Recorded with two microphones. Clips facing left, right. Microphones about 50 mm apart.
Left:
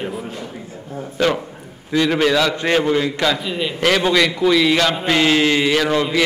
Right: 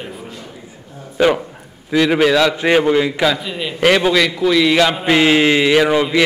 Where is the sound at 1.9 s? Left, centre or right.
Centre.